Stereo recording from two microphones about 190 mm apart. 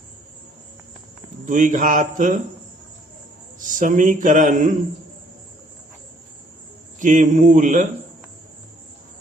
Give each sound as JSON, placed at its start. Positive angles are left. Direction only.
{"t": 1.5, "sound": "speech", "side_deg": -45}
{"t": 3.6, "sound": "speech", "side_deg": -45}
{"t": 7.0, "sound": "a man's voice", "side_deg": -40}